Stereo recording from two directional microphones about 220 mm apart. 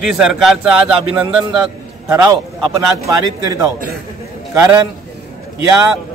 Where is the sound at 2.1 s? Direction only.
15° right (ahead or behind).